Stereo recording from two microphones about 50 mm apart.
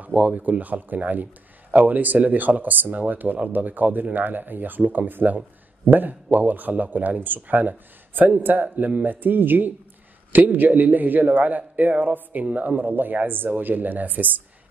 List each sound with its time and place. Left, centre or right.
0.0 s a man's voice: right